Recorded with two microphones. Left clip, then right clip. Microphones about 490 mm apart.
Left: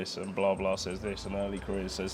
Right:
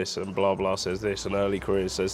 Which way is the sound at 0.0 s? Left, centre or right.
Right.